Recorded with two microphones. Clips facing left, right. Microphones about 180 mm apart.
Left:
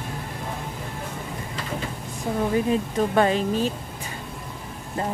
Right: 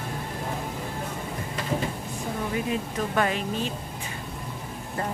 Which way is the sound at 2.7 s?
30° left (ahead or behind).